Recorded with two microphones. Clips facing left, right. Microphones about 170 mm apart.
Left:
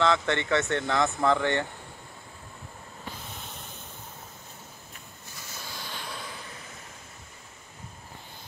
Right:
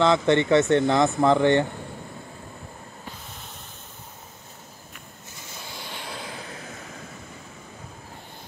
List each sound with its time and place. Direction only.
0.0 s speech: 20° right (ahead or behind)